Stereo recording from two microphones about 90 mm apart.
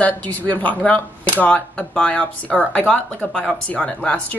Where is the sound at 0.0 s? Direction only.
20° left (ahead or behind).